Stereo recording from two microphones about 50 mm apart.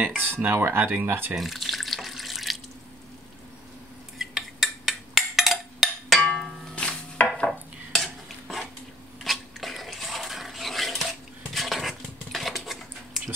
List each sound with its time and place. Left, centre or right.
0.2 s speech: right
1.4 s water tap: centre
4.2 s a sound: centre
6.2 s a sound: centre
7.9 s stir: centre
9.2 s water: centre